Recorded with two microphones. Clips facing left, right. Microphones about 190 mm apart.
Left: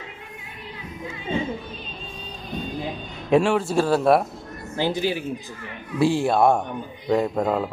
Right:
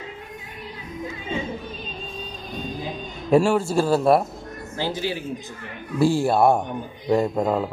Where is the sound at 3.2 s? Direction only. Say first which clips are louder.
Right 1 dB; 5° right (ahead or behind).